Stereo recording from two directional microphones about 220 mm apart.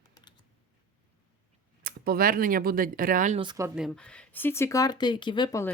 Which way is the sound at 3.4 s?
20° right (ahead or behind).